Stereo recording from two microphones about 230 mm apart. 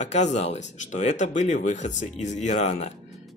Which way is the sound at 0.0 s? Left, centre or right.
Left.